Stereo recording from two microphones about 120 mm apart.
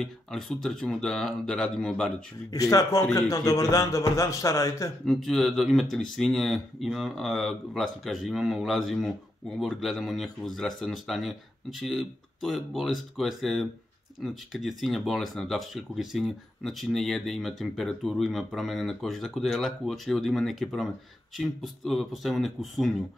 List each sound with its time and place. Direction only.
0.0 s speech: 5° left (ahead or behind)
2.5 s a man's voice: 30° left (ahead or behind)
5.0 s speech: centre (ahead or behind)